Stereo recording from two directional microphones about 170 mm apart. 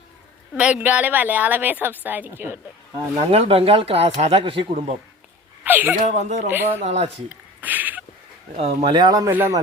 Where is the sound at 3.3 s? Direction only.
35° right (ahead or behind).